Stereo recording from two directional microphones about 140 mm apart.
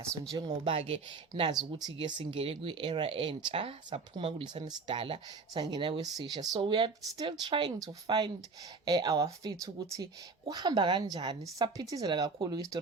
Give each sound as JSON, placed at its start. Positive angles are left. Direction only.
{"t": 0.0, "sound": "speech", "side_deg": -25}
{"t": 0.7, "sound": "speech", "side_deg": -45}
{"t": 1.3, "sound": "speech", "side_deg": -30}